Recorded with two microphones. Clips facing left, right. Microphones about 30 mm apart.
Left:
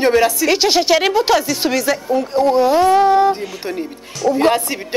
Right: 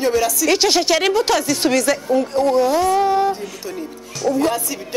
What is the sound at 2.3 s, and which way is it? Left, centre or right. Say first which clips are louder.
Speech: left 5 dB; centre.